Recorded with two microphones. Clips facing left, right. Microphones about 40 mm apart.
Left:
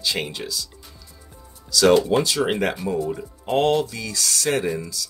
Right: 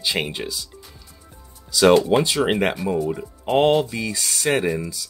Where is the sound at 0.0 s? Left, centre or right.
Right.